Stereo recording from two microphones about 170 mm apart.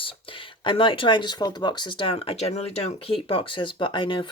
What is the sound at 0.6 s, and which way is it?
Speech, 30° left (ahead or behind).